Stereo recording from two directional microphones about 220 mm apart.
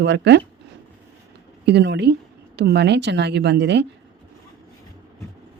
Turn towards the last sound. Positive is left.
turn(degrees=-50)  # may be behind; listen again after turning